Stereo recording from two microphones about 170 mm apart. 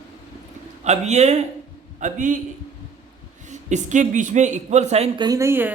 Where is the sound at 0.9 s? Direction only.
40° right (ahead or behind).